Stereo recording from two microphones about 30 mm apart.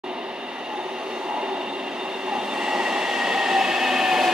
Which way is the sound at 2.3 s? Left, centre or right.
Right.